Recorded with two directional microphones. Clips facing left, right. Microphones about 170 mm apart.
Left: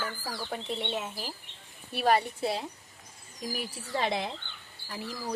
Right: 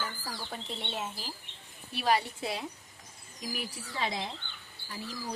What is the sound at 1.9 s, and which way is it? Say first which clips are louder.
Speech: left 3 dB; 55° left (ahead or behind).